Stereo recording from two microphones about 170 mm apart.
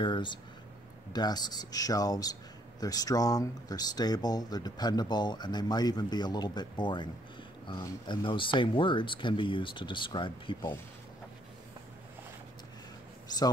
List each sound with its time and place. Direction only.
0.0 s speech: 30° left (ahead or behind)